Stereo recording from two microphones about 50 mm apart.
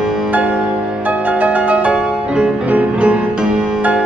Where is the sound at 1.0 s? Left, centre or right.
Right.